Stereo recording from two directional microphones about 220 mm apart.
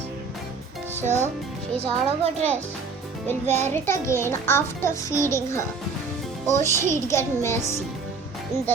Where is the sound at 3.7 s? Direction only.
10° left (ahead or behind).